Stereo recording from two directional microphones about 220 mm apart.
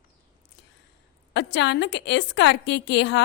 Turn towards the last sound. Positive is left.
turn(degrees=50)  # may be behind; listen again after turning